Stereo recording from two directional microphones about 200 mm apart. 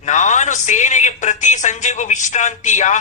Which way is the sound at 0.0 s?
35° left (ahead or behind).